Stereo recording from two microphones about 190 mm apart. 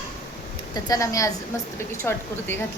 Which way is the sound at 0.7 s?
20° left (ahead or behind).